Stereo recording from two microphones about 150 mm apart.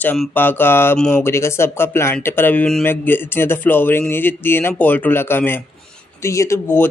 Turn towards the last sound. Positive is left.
turn(degrees=15)  # may be behind; listen again after turning